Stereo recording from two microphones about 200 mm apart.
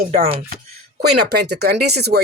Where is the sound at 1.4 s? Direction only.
55° right (ahead or behind).